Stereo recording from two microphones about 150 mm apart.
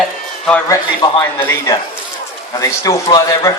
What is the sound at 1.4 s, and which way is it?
A man's voice, 15° left (ahead or behind).